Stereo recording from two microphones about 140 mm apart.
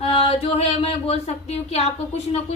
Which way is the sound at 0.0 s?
45° left (ahead or behind).